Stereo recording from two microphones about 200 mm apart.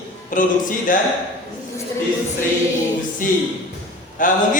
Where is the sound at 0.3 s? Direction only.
40° left (ahead or behind).